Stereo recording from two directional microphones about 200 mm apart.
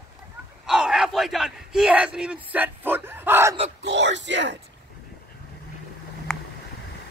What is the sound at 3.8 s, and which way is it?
Speech, 60° right (ahead or behind).